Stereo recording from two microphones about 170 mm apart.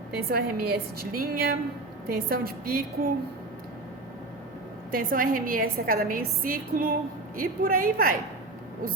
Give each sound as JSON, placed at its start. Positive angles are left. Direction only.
{"t": 0.1, "sound": "a woman's voice", "side_deg": -65}
{"t": 4.9, "sound": "a woman's voice", "side_deg": -55}